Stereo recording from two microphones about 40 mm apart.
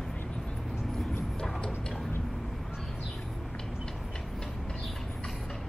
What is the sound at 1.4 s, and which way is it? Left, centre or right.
Tick-tock, centre.